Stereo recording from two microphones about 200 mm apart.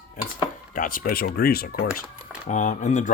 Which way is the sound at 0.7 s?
45° left (ahead or behind).